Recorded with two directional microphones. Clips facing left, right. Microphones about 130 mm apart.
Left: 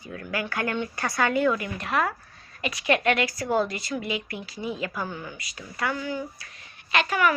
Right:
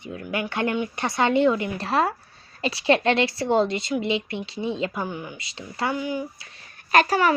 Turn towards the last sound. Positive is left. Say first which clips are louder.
# right 4 dB
turn(degrees=-35)  # may be behind; listen again after turning